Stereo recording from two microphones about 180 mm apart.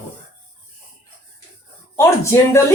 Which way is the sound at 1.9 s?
15° left (ahead or behind).